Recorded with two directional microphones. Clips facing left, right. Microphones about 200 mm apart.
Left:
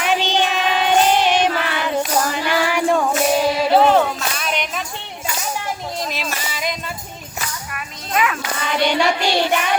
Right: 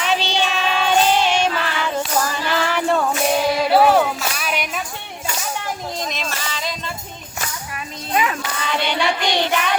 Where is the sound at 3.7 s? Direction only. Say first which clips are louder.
Even; 10° right (ahead or behind).